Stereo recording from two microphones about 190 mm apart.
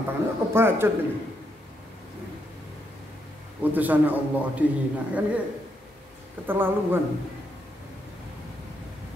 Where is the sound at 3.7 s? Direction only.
10° right (ahead or behind).